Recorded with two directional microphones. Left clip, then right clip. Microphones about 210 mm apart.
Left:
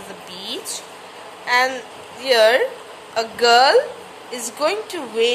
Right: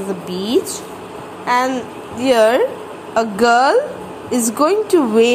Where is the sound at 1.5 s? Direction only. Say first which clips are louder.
Right 2 dB; 5° left (ahead or behind).